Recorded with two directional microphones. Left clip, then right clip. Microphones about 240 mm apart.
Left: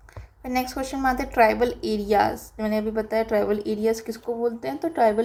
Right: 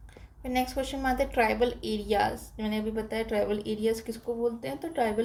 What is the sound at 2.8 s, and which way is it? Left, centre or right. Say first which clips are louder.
Speech: left 6 dB; centre.